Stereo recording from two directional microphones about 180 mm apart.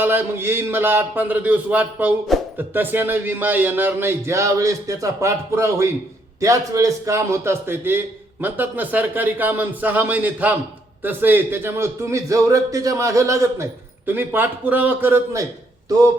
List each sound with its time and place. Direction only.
0.0 s a man's voice: 10° right (ahead or behind)